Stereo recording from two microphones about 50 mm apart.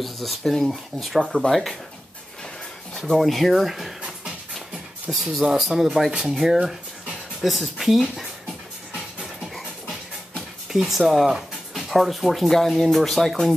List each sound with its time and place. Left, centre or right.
0.0 s speech: centre
1.2 s speech: centre
1.5 s speech: centre
2.9 s speech: centre
5.1 s speech: centre
10.7 s speech: centre